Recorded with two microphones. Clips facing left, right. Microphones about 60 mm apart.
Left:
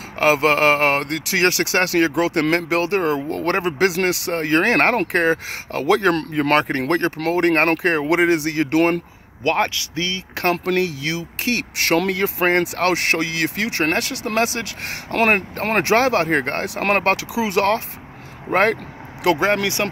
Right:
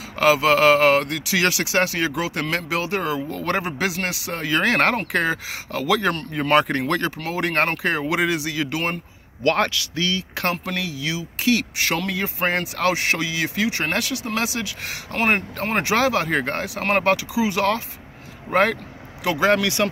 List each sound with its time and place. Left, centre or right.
0.2 s speech: left
6.6 s speech: left
9.4 s speech: left
10.6 s speech: left
15.1 s speech: left
15.9 s speech: left
18.5 s speech: left
19.4 s speech: left